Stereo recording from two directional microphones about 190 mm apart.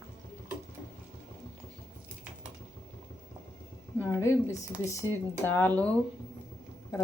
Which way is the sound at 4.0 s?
15° left (ahead or behind).